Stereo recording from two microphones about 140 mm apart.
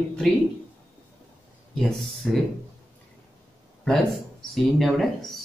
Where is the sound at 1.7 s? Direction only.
Centre (ahead or behind).